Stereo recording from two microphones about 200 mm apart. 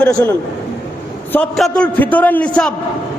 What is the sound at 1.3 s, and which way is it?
A man's voice, 5° left (ahead or behind).